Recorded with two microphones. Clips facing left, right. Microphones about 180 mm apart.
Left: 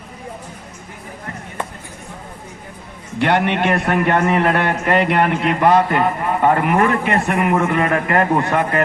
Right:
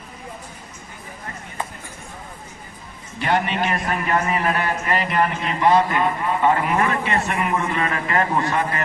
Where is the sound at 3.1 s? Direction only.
70° left (ahead or behind).